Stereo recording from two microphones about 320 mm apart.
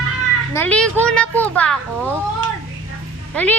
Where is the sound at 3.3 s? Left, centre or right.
Centre.